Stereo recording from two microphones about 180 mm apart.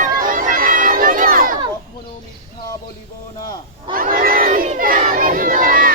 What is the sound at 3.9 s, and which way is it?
Crowd, 55° right (ahead or behind).